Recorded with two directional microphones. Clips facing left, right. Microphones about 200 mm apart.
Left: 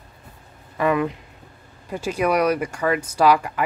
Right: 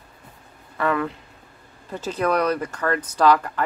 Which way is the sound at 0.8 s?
15° left (ahead or behind).